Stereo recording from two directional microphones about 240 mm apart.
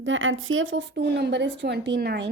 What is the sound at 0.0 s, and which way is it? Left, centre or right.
A woman's voice, right.